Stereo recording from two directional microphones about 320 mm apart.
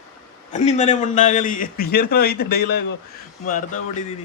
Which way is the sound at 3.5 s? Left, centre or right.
Left.